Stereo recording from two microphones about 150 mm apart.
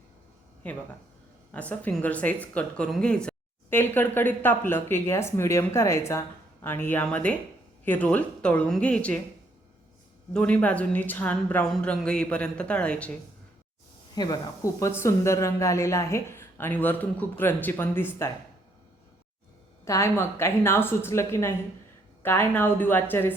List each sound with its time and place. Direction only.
0.6 s speech: 10° left (ahead or behind)
10.3 s speech: 10° left (ahead or behind)
14.2 s speech: 25° left (ahead or behind)
19.8 s speech: 20° left (ahead or behind)